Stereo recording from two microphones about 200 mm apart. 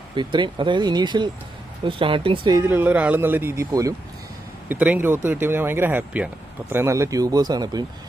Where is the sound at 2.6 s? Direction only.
10° right (ahead or behind).